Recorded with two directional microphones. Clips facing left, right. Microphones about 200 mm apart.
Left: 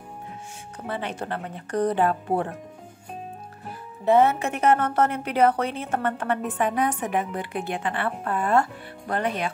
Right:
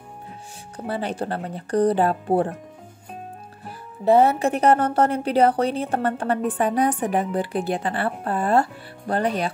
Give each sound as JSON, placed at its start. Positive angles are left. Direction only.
{"t": 0.8, "sound": "a woman's voice", "side_deg": -35}
{"t": 4.0, "sound": "a woman's voice", "side_deg": -35}